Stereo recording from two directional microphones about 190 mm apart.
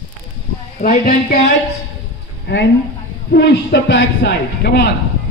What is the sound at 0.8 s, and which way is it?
Speech, 45° left (ahead or behind).